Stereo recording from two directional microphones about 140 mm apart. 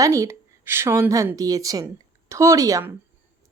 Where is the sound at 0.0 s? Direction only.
20° right (ahead or behind).